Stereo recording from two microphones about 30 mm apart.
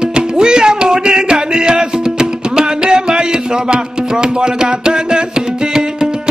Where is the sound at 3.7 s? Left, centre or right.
Right.